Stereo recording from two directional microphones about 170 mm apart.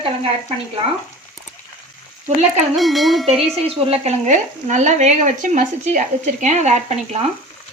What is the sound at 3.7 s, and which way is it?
Speech, 35° right (ahead or behind).